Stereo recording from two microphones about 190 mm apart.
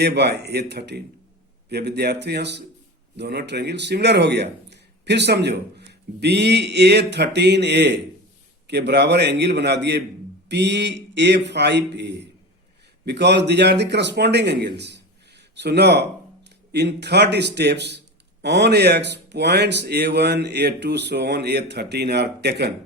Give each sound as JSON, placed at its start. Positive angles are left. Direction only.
{"t": 0.0, "sound": "speech", "side_deg": -60}